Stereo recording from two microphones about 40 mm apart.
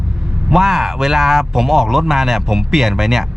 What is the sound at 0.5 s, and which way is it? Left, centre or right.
Speech, centre.